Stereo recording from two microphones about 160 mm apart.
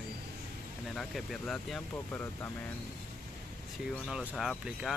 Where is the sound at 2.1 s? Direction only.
15° left (ahead or behind).